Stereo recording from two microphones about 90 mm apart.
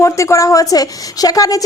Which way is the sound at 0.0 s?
35° left (ahead or behind).